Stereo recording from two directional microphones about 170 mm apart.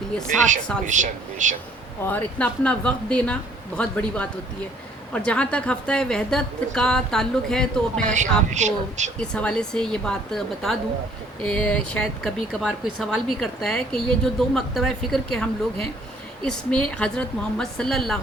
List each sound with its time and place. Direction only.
0.3 s speech: 45° right (ahead or behind)
2.0 s speech: 10° left (ahead or behind)
8.0 s speech: 45° right (ahead or behind)
9.1 s speech: 5° left (ahead or behind)